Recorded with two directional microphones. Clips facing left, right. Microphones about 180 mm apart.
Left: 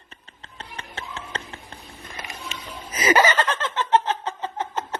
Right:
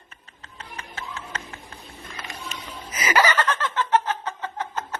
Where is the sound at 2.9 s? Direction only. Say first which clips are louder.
Left 3 dB; 30° left (ahead or behind).